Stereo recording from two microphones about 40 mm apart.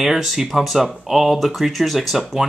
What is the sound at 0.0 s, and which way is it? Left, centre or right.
Speech, centre.